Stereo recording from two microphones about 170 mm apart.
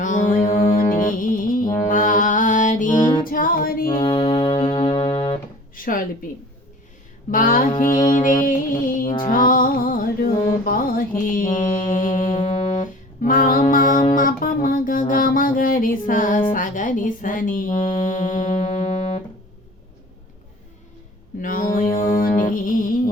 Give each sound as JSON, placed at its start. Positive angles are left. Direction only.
{"t": 0.0, "sound": "music", "side_deg": 50}
{"t": 1.9, "sound": "mantra", "side_deg": 50}
{"t": 3.2, "sound": "music", "side_deg": 55}
{"t": 3.9, "sound": "music", "side_deg": 30}
{"t": 4.9, "sound": "music", "side_deg": 35}
{"t": 5.7, "sound": "a sound", "side_deg": 55}
{"t": 7.3, "sound": "music", "side_deg": 55}
{"t": 10.7, "sound": "mantra", "side_deg": 55}
{"t": 21.4, "sound": "music", "side_deg": 55}